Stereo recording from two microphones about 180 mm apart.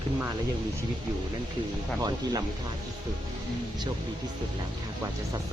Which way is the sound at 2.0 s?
20° right (ahead or behind).